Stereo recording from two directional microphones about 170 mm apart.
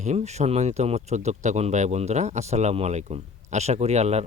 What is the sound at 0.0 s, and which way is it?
Speech, 40° right (ahead or behind).